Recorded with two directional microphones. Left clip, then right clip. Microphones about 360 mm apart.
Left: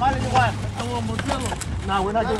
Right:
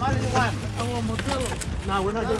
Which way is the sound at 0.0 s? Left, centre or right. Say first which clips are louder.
Left 5 dB; centre.